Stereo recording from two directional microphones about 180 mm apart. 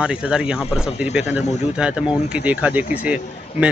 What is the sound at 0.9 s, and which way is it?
Speech, 35° left (ahead or behind).